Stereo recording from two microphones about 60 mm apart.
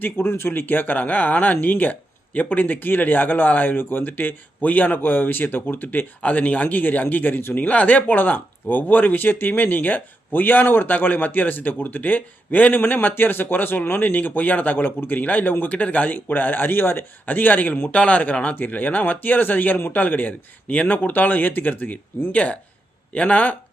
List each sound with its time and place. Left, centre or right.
0.0 s speech: left